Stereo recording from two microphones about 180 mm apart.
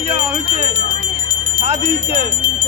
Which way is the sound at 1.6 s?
40° right (ahead or behind).